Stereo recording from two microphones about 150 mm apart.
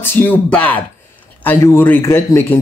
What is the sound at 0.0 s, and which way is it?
Speech, 15° left (ahead or behind).